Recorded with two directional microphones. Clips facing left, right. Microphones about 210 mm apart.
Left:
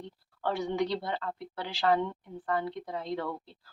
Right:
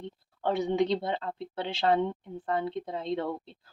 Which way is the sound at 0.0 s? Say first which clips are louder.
Right 3 dB; 20° right (ahead or behind).